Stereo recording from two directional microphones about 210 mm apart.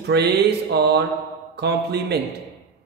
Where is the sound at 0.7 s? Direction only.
55° right (ahead or behind).